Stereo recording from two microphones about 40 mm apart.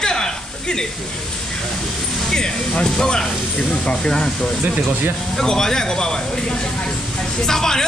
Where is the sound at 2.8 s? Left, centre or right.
Centre.